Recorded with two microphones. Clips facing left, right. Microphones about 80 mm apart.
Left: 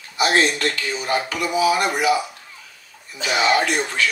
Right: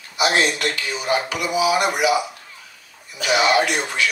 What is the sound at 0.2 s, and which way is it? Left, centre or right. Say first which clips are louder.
Speech: left 1 dB; left.